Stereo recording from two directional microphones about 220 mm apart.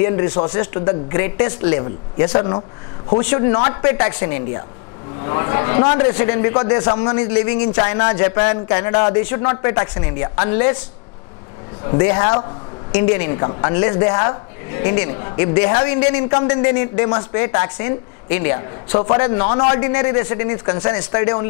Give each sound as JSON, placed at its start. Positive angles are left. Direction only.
{"t": 0.0, "sound": "a woman's voice", "side_deg": 25}
{"t": 11.8, "sound": "a woman's voice", "side_deg": 20}